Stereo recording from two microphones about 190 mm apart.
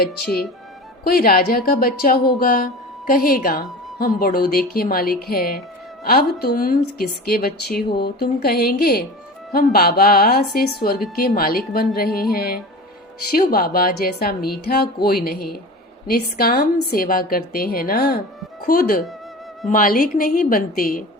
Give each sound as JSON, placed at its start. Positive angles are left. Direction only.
{"t": 1.0, "sound": "a woman's voice", "side_deg": 50}
{"t": 13.3, "sound": "a woman's voice", "side_deg": 50}